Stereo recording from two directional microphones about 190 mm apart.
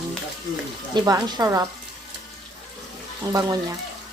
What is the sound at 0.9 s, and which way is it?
Speech, 20° right (ahead or behind).